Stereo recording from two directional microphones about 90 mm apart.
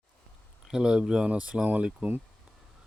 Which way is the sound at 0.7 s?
10° right (ahead or behind).